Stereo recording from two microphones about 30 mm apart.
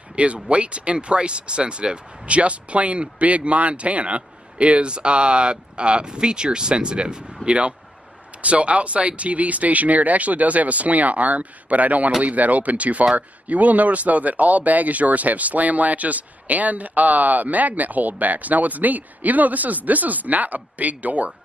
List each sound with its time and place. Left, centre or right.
0.1 s speech: right
7.4 s speech: right